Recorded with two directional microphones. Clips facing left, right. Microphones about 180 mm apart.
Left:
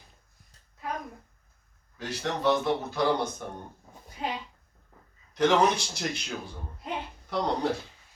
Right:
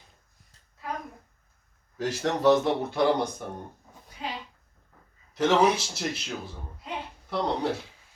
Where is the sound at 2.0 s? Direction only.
45° right (ahead or behind).